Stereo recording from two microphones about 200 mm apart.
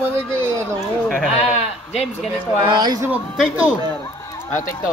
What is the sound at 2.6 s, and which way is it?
Speech, 20° right (ahead or behind).